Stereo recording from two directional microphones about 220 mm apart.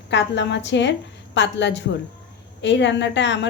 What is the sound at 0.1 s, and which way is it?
Speech, 55° left (ahead or behind).